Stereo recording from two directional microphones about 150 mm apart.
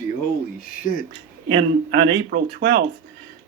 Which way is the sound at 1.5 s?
90° right.